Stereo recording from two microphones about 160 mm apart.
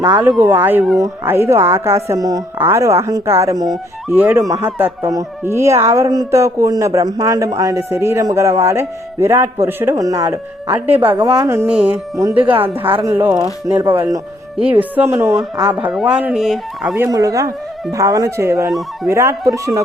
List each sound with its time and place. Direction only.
0.2 s speech: 15° right (ahead or behind)
4.1 s speech: 15° right (ahead or behind)
11.2 s speech: 25° right (ahead or behind)
17.1 s speech: 20° right (ahead or behind)